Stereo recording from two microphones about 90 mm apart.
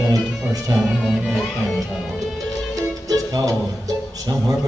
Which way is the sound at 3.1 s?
45° right (ahead or behind).